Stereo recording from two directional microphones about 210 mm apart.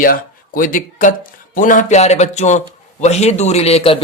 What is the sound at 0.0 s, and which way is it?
Speech, 40° left (ahead or behind).